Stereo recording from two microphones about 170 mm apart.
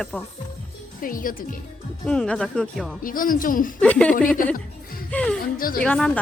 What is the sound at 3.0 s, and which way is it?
Speech, 55° left (ahead or behind).